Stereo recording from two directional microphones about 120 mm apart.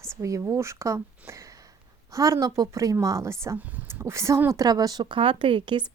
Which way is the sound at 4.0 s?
25° right (ahead or behind).